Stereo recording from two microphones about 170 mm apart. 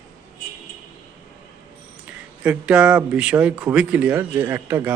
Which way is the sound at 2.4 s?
5° right (ahead or behind).